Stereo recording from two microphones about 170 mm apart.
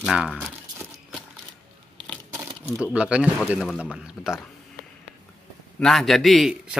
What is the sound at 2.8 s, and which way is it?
A man's voice, 5° right (ahead or behind).